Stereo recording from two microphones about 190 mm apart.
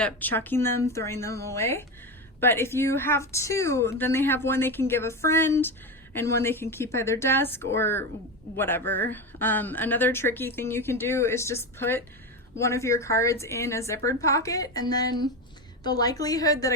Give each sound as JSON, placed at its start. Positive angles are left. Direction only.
{"t": 0.0, "sound": "a woman's voice", "side_deg": 10}